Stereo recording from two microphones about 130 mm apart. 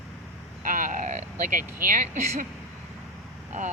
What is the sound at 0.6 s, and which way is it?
Vehicle, 90° right.